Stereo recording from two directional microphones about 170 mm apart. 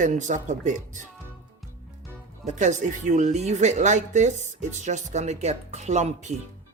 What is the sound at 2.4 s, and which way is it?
A woman's voice, 45° right (ahead or behind).